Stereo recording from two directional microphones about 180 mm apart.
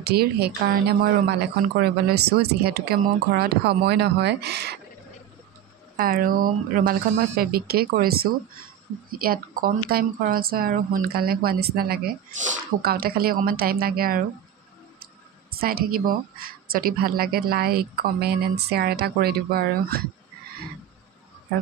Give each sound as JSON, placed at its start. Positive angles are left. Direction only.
{"t": 0.1, "sound": "speech", "side_deg": -60}
{"t": 5.9, "sound": "speech", "side_deg": -55}
{"t": 15.6, "sound": "speech", "side_deg": -55}